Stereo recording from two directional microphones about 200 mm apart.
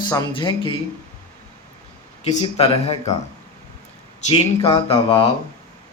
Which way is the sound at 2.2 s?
25° left (ahead or behind).